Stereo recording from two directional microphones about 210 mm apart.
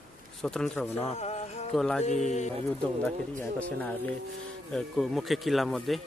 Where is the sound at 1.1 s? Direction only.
30° left (ahead or behind).